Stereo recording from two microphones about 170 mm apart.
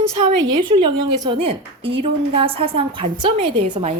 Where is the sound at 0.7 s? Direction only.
25° right (ahead or behind).